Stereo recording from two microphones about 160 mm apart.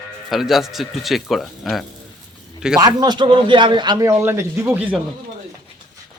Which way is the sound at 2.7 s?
25° right (ahead or behind).